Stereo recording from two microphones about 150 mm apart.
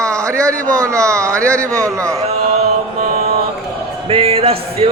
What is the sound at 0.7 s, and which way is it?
A man's voice, 20° right (ahead or behind).